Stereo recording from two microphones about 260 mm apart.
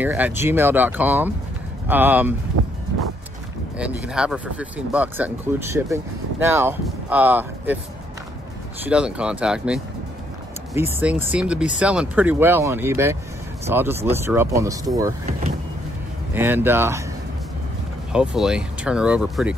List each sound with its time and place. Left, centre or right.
0.0 s speech: centre
3.7 s speech: centre
8.8 s speech: centre
16.3 s speech: centre
18.1 s speech: centre